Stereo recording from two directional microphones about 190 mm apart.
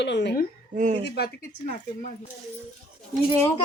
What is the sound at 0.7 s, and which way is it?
Speech, 40° right (ahead or behind).